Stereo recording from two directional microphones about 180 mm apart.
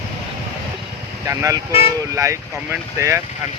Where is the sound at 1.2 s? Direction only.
15° right (ahead or behind).